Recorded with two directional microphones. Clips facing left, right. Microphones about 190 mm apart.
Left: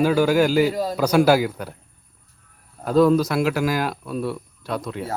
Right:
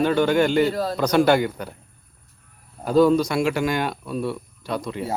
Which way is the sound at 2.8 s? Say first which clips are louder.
Even; centre (ahead or behind).